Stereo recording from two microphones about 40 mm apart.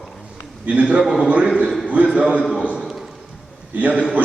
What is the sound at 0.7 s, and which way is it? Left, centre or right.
Speech, right.